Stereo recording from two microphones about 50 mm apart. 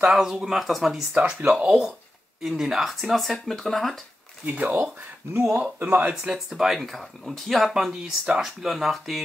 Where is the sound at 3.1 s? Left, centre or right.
Centre.